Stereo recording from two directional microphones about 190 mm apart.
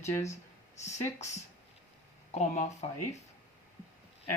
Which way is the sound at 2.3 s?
35° left (ahead or behind).